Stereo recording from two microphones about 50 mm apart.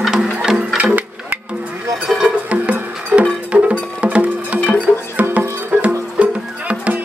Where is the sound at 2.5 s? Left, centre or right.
Right.